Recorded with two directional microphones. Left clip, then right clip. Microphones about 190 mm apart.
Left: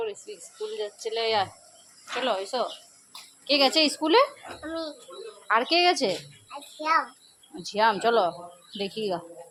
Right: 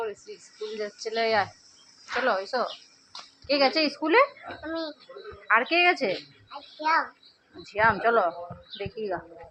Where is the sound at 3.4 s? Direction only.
15° left (ahead or behind).